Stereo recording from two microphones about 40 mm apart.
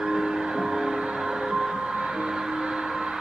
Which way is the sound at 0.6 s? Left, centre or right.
Centre.